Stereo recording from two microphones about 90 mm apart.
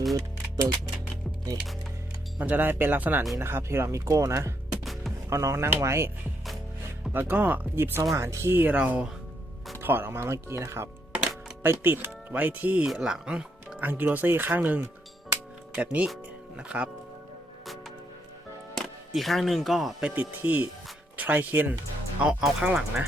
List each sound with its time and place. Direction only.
0.1 s music: 40° right (ahead or behind)
2.4 s speech: 20° right (ahead or behind)
4.8 s music: centre (ahead or behind)
5.3 s speech: 35° right (ahead or behind)
7.1 s speech: 20° right (ahead or behind)
11.1 s music: 10° right (ahead or behind)
11.6 s speech: 25° right (ahead or behind)
12.9 s speech: 5° right (ahead or behind)
18.8 s speech: centre (ahead or behind)
20.1 s speech: 20° right (ahead or behind)
22.2 s speech: 10° right (ahead or behind)